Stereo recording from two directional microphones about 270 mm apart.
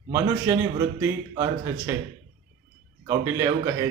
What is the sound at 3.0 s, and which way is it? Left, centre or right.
Speech, centre.